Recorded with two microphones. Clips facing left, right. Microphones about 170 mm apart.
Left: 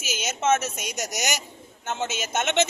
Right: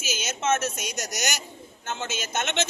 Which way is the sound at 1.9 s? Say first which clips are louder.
Left 3 dB; 20° left (ahead or behind).